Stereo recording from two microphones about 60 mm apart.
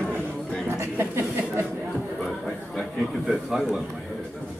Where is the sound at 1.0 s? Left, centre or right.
Right.